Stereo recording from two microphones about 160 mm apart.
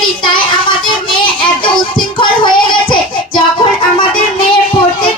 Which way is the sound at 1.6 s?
30° left (ahead or behind).